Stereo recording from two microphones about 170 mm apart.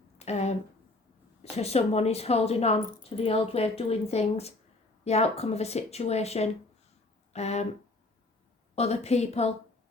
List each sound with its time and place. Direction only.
0.2 s a sound: 40° left (ahead or behind)
1.4 s speech: 40° left (ahead or behind)
8.7 s speech: 40° left (ahead or behind)